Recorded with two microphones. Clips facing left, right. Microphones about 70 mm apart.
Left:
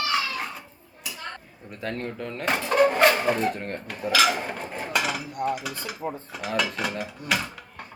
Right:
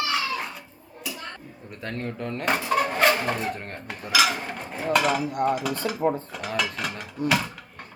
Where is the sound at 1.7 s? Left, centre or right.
Centre.